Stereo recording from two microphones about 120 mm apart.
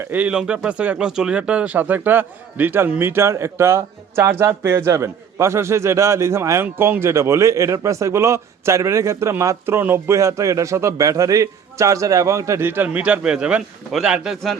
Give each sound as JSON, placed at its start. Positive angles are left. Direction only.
{"t": 0.0, "sound": "speech", "side_deg": -15}